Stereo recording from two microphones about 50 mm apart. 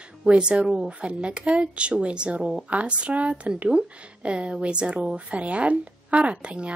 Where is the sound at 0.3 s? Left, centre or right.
Centre.